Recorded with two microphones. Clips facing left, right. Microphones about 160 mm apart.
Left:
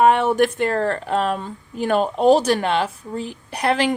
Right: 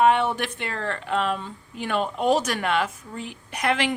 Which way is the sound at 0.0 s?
45° left (ahead or behind).